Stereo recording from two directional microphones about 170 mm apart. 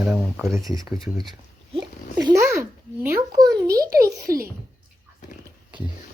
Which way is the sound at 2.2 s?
20° right (ahead or behind).